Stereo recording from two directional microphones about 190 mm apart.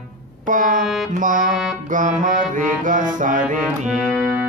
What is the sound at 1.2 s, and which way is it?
Music, 45° right (ahead or behind).